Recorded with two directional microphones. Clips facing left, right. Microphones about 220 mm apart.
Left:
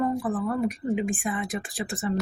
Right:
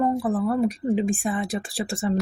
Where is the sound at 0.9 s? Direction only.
35° right (ahead or behind).